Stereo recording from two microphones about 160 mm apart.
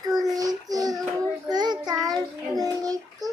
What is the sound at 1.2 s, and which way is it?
Child singing, 25° right (ahead or behind).